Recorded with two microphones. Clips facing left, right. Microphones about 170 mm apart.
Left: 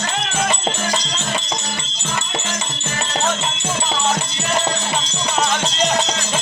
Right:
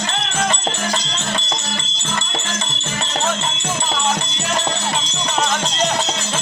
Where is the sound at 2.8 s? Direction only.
5° left (ahead or behind).